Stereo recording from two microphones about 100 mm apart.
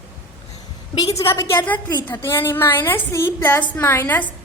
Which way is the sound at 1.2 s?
25° left (ahead or behind).